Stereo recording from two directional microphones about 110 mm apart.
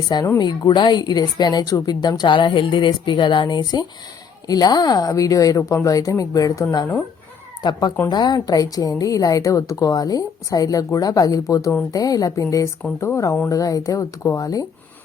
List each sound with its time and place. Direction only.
0.3 s speech: 40° left (ahead or behind)